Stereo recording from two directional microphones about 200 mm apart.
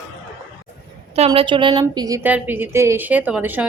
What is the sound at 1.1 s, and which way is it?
A woman's voice, 30° right (ahead or behind).